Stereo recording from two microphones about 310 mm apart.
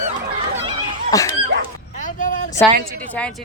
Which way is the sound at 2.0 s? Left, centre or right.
Left.